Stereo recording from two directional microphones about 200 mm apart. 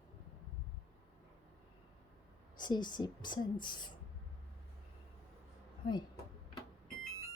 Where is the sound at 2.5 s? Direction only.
20° left (ahead or behind).